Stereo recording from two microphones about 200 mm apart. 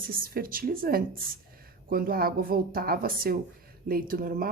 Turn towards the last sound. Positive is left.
turn(degrees=-45)  # may be behind; listen again after turning